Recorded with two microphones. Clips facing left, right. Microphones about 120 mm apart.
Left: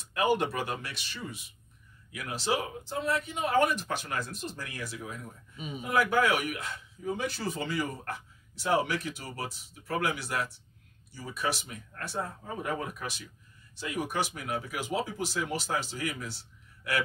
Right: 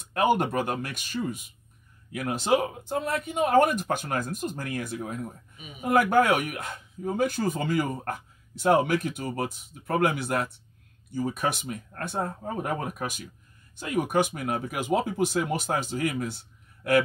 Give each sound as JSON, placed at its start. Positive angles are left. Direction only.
{"t": 0.1, "sound": "speech", "side_deg": -50}